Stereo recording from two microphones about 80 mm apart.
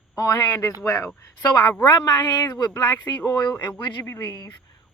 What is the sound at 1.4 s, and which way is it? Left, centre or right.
A woman's voice, left.